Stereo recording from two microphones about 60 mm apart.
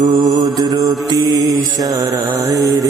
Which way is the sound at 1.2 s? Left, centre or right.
Right.